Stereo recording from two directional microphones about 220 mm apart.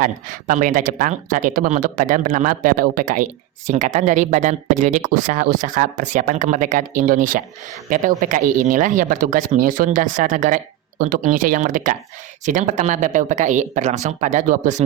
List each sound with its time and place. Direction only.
0.0 s speech: 35° right (ahead or behind)